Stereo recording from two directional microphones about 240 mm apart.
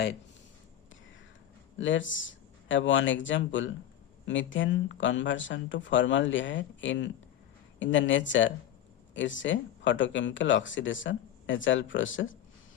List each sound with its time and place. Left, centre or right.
1.8 s speech: left